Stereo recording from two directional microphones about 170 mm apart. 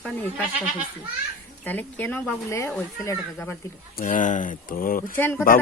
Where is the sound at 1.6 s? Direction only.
10° left (ahead or behind).